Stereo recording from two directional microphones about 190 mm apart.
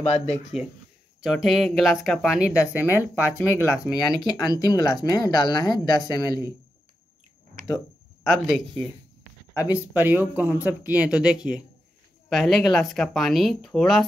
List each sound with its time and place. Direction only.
0.3 s speech: centre (ahead or behind)
3.3 s speech: 10° left (ahead or behind)
3.8 s speech: 5° right (ahead or behind)
4.5 s speech: 20° left (ahead or behind)
8.2 s speech: centre (ahead or behind)
9.7 s speech: 10° right (ahead or behind)